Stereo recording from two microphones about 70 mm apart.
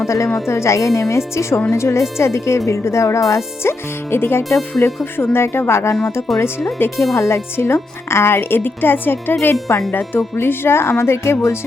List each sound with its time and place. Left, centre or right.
0.0 s speech: left